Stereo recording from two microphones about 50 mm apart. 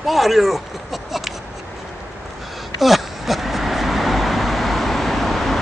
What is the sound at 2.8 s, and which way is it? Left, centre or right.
Vehicle, centre.